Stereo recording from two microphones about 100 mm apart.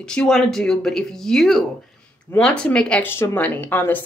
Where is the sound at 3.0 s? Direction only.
25° left (ahead or behind).